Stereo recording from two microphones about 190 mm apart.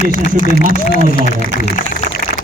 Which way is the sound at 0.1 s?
45° left (ahead or behind).